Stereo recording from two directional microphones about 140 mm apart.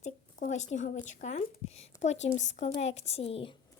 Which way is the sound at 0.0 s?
60° left (ahead or behind).